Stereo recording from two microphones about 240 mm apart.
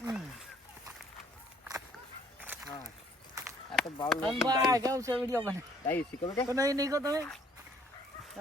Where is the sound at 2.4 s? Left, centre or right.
Centre.